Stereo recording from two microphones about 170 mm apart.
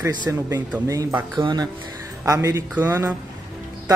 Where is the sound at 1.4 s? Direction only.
25° right (ahead or behind).